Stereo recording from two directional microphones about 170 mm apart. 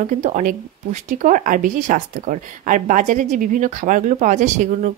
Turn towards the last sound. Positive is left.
turn(degrees=-45)  # may be behind; listen again after turning